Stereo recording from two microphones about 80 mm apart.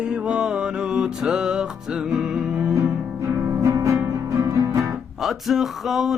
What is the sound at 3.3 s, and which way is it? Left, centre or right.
Music, right.